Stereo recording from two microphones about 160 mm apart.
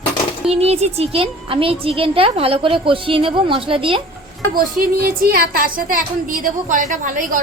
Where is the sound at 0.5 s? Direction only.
40° right (ahead or behind).